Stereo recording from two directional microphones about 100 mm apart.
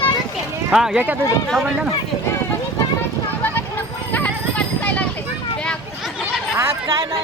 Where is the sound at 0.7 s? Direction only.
10° right (ahead or behind).